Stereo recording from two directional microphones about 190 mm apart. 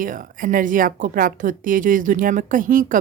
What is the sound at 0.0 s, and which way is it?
A woman's voice, 45° right (ahead or behind).